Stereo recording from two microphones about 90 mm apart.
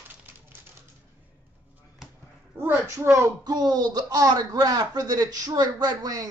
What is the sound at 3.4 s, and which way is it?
Speech, 50° right (ahead or behind).